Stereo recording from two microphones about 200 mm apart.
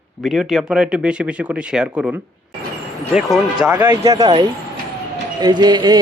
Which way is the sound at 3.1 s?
5° right (ahead or behind).